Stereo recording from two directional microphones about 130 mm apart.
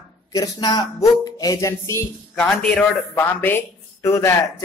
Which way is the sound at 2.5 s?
5° left (ahead or behind).